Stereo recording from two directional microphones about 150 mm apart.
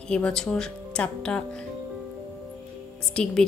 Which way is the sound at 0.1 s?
5° left (ahead or behind).